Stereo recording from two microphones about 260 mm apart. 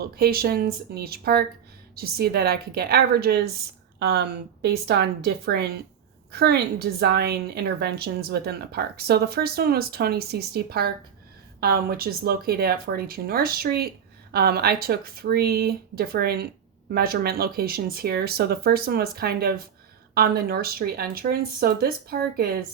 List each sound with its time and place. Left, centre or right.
0.0 s a woman's voice: right